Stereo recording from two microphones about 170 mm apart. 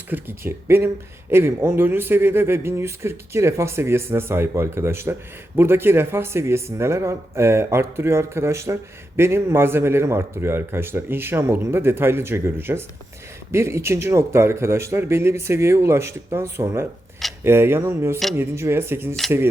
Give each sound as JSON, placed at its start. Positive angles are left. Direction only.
{"t": 0.1, "sound": "speech", "side_deg": -10}